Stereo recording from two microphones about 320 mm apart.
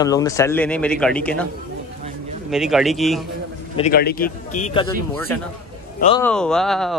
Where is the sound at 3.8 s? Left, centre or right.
Left.